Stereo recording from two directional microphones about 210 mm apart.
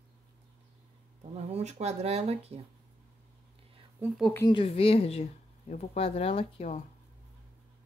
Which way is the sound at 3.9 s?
10° right (ahead or behind).